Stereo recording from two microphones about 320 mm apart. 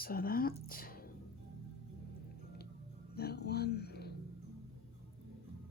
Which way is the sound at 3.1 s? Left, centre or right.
Left.